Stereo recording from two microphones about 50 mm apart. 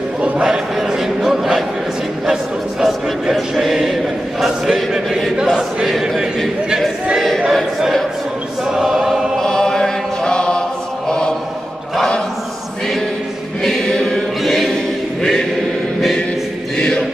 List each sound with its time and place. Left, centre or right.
0.2 s a sound: centre
2.8 s chant: centre
4.9 s a sound: centre
8.7 s choir: centre
9.4 s chant: centre
13.7 s music: centre
14.4 s choir: centre
16.7 s choir: centre